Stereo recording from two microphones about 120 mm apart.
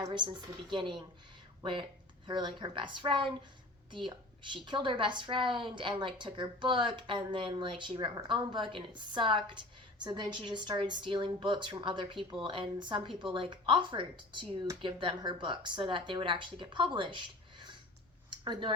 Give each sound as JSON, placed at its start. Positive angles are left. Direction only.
{"t": 0.1, "sound": "speech", "side_deg": -40}
{"t": 2.2, "sound": "speech", "side_deg": -40}
{"t": 4.5, "sound": "a woman's voice", "side_deg": -40}
{"t": 18.3, "sound": "a sound", "side_deg": -40}